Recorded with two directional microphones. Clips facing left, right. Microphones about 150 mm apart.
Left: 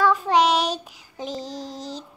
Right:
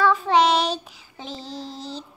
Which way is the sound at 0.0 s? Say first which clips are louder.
Even; 10° left (ahead or behind).